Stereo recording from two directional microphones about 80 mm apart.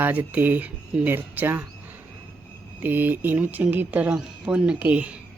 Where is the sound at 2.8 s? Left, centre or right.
Right.